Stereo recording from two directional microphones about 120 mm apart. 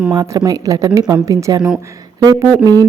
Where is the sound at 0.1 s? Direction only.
30° right (ahead or behind).